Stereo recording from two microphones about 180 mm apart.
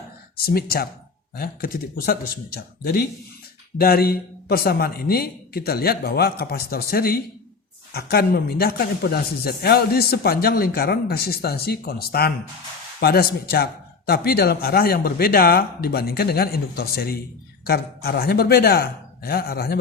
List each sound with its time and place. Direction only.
0.4 s speech: 55° left (ahead or behind)